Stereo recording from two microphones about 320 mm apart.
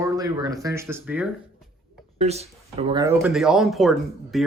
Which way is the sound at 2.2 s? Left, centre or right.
Centre.